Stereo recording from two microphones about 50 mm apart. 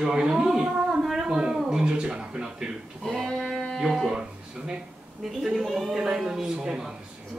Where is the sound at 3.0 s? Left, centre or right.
Centre.